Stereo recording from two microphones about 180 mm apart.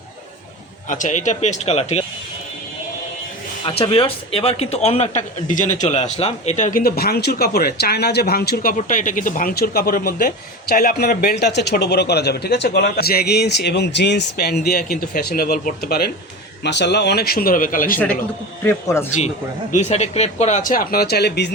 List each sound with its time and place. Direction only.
0.9 s speech: 45° left (ahead or behind)
3.8 s a man's voice: 30° left (ahead or behind); by 16.1 s 60° left (ahead or behind)
16.6 s a man's voice: 75° left (ahead or behind); by 18.0 s 50° left (ahead or behind)
18.6 s speech: 15° left (ahead or behind)
19.7 s speech: 40° left (ahead or behind); by 21.5 s 65° left (ahead or behind)